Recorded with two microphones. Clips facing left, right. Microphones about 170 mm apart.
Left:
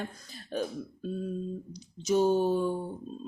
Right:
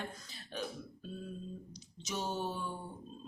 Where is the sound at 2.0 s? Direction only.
40° left (ahead or behind).